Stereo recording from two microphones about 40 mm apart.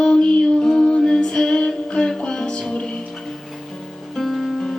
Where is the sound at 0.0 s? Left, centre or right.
Left.